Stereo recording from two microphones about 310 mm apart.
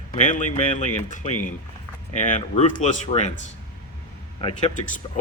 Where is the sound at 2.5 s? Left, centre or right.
Left.